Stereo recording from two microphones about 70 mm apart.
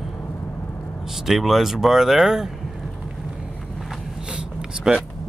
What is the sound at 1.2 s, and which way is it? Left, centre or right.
Speech, centre.